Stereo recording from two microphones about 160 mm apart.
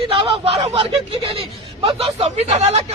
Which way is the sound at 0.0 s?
35° right (ahead or behind).